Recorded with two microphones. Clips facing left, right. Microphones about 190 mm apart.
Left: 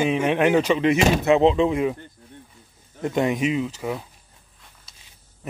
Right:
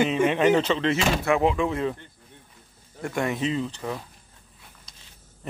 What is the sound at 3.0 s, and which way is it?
Speech, 20° left (ahead or behind).